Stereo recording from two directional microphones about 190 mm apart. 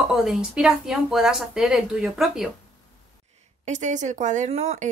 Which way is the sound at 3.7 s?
40° right (ahead or behind).